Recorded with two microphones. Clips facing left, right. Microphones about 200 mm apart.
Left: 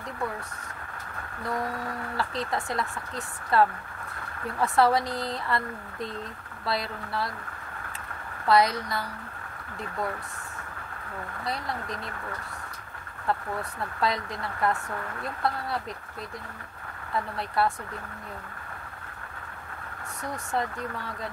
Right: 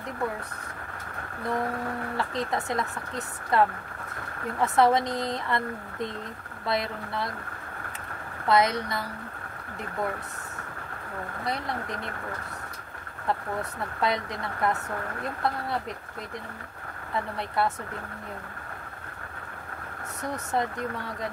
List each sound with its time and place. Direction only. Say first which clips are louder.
2.1 s speech: even; 20° right (ahead or behind)
6.6 s speech: right 2 dB; 20° right (ahead or behind)
8.5 s speech: left 1 dB; 20° right (ahead or behind)
11.4 s speech: right 1 dB; 20° right (ahead or behind)
13.6 s speech: even; 20° right (ahead or behind)
17.4 s speech: left 1 dB; 20° right (ahead or behind)